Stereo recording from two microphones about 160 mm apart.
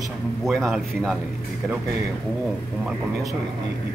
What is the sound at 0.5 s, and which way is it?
Speech, centre (ahead or behind).